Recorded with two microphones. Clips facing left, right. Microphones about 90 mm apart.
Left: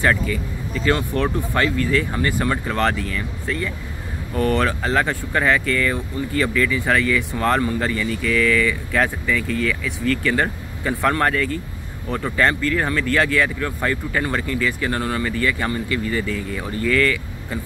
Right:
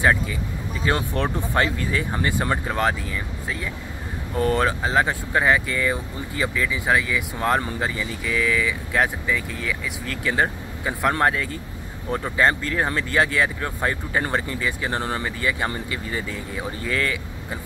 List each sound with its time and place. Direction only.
0.0 s speech: 20° right (ahead or behind)